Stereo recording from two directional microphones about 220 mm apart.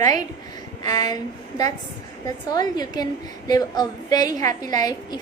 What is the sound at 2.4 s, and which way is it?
A woman's voice, 20° left (ahead or behind).